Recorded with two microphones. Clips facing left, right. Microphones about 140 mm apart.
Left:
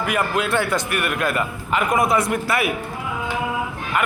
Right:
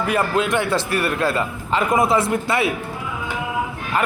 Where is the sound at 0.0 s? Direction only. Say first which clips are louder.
Right 2 dB; 30° right (ahead or behind).